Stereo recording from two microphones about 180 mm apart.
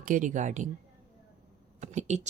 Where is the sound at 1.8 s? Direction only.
40° right (ahead or behind).